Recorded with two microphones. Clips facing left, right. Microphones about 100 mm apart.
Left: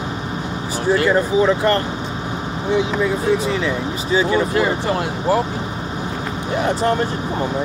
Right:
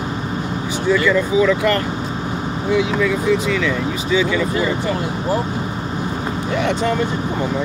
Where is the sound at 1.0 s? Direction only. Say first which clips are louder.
Left 1 dB; 40° left (ahead or behind).